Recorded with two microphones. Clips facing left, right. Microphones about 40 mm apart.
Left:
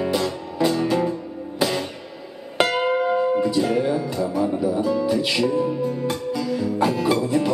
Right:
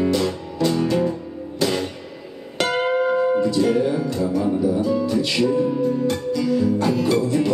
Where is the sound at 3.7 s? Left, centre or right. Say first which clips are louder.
Right 1 dB; centre.